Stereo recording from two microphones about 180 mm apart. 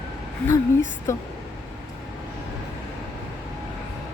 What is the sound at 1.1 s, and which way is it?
Speech, 15° left (ahead or behind).